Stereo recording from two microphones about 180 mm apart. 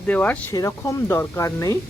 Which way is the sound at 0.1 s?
10° left (ahead or behind).